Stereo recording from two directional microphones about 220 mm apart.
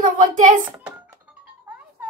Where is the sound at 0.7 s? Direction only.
5° right (ahead or behind).